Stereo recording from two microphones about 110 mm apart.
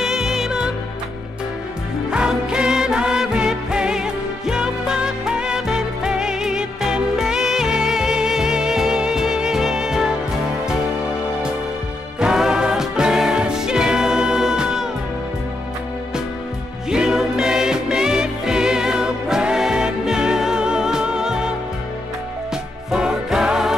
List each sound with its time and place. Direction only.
0.0 s music: 5° right (ahead or behind)
2.0 s music: 10° right (ahead or behind)
12.2 s music: 5° right (ahead or behind)
16.9 s music: 5° right (ahead or behind)
22.8 s music: 5° right (ahead or behind)